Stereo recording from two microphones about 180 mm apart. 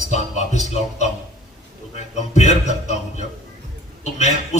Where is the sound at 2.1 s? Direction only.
40° left (ahead or behind).